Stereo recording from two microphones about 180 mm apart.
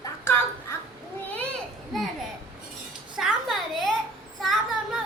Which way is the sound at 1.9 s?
Centre (ahead or behind).